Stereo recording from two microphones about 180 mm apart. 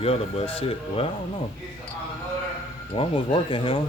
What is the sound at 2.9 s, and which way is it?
Speech, 35° left (ahead or behind).